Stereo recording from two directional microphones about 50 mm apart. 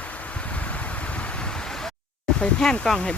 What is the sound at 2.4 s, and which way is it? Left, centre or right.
Speech, centre.